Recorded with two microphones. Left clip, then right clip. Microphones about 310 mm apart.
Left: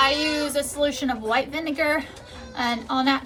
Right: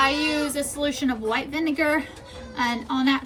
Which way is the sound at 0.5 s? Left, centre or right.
Centre.